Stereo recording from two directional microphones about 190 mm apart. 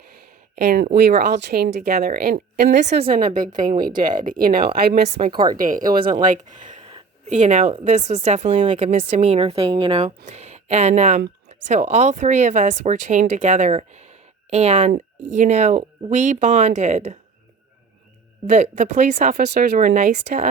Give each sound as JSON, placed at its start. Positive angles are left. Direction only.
{"t": 0.5, "sound": "speech", "side_deg": -55}
{"t": 5.1, "sound": "speech", "side_deg": -25}
{"t": 5.5, "sound": "speech", "side_deg": -45}
{"t": 18.4, "sound": "speech", "side_deg": -45}